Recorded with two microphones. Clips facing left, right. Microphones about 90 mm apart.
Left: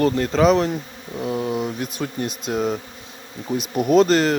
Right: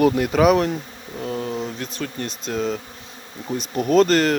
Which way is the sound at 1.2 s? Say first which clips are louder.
Left 3 dB; 15° left (ahead or behind).